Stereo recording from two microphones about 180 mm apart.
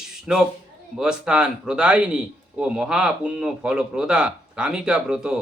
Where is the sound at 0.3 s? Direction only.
5° right (ahead or behind).